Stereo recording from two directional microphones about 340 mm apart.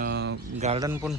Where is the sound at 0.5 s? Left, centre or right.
Centre.